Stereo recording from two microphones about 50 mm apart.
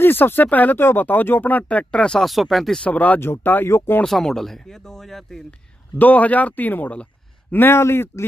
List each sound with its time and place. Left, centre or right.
0.0 s speech: left
2.1 s speech: centre
2.8 s speech: left
3.6 s speech: left
4.0 s speech: centre
5.9 s speech: left
7.5 s speech: left